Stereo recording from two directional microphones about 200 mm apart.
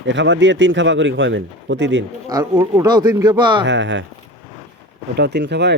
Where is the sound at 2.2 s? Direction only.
15° right (ahead or behind).